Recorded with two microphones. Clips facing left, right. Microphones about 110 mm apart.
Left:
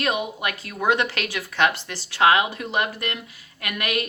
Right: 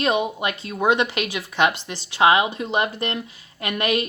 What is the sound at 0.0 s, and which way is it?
A woman's voice, 25° right (ahead or behind).